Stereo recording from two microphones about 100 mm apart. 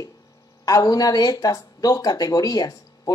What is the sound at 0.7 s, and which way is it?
Speech, 35° left (ahead or behind).